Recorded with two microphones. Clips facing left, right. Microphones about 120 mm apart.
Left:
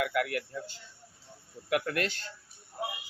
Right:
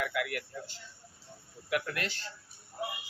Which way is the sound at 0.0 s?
50° left (ahead or behind).